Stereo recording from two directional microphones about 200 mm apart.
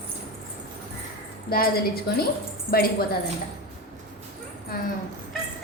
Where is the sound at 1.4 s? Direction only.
50° left (ahead or behind).